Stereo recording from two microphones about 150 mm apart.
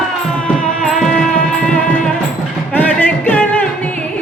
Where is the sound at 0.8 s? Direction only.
5° left (ahead or behind).